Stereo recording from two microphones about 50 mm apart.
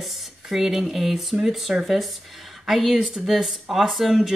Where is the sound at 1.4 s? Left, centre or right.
Centre.